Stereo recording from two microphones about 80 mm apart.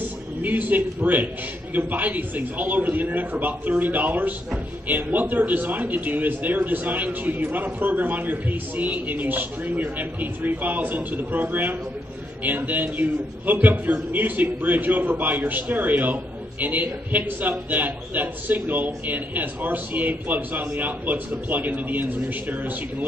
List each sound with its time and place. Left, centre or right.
0.4 s a man's voice: right